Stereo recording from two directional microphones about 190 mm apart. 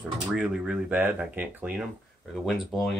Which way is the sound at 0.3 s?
5° right (ahead or behind).